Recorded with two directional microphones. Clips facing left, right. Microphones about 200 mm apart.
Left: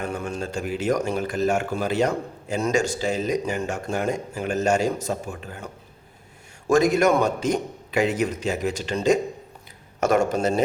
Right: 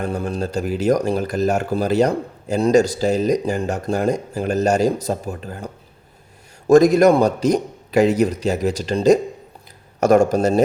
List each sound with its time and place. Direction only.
0.0 s speech: 35° right (ahead or behind)